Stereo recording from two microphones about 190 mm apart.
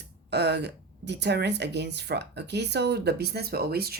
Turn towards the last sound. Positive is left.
turn(degrees=-55)  # may be behind; listen again after turning